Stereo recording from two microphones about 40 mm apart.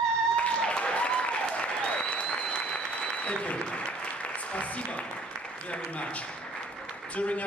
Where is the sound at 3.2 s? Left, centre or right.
Left.